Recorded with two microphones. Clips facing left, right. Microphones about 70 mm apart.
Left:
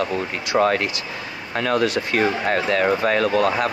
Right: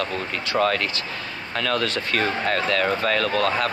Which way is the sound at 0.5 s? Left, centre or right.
Left.